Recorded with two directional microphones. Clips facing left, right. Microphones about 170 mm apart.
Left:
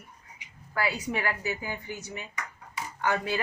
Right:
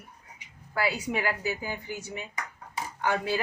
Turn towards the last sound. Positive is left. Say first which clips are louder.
# right 1 dB
turn(degrees=-15)  # may be behind; listen again after turning